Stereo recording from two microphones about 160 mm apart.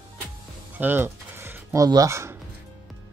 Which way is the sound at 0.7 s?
10° right (ahead or behind).